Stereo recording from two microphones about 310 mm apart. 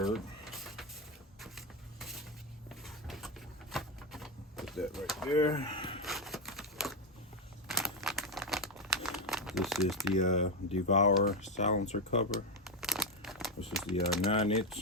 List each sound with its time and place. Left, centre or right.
0.0 s a sound: centre
5.3 s speech: centre
6.0 s a sound: centre
7.7 s crumpling: centre
10.2 s speech: left
12.6 s crumpling: centre
13.7 s speech: centre
14.3 s speech: centre